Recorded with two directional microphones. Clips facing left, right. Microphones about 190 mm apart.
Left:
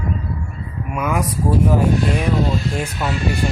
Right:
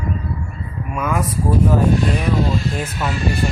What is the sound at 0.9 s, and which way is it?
Speech, 15° left (ahead or behind).